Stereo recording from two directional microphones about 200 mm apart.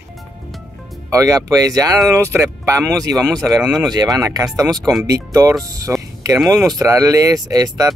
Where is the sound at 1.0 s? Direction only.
15° right (ahead or behind).